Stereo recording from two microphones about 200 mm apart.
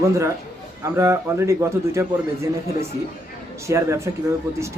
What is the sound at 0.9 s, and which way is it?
Speech, 15° right (ahead or behind).